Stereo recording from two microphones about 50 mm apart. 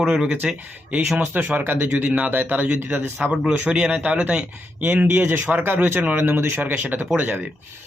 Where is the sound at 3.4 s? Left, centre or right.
Centre.